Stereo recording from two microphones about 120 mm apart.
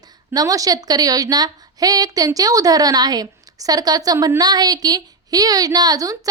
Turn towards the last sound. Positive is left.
turn(degrees=-30)  # may be behind; listen again after turning